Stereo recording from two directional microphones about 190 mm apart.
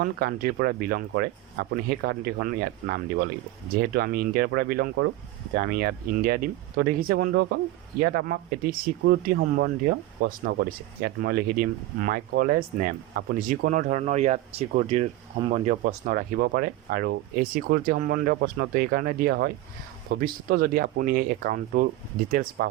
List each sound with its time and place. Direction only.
0.0 s speech: 50° right (ahead or behind)